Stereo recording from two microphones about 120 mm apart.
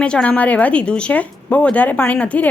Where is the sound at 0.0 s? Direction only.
10° left (ahead or behind).